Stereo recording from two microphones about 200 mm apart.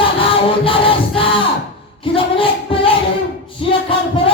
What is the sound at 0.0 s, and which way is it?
Music, 25° left (ahead or behind).